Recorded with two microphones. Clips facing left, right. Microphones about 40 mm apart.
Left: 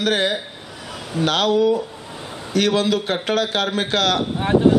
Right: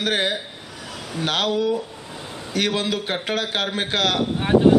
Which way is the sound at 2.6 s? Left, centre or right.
Left.